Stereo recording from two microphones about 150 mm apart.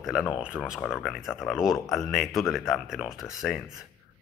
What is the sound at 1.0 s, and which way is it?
Speech, centre (ahead or behind).